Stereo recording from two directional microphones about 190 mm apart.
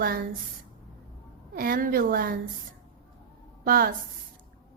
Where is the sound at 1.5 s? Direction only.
50° right (ahead or behind).